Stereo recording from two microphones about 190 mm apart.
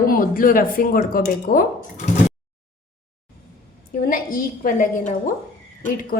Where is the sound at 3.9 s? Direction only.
50° left (ahead or behind).